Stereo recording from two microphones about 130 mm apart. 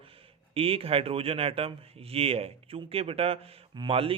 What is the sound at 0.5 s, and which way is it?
A man's voice, 45° right (ahead or behind).